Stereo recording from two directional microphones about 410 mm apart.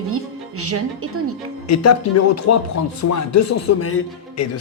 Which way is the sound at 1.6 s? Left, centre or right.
Left.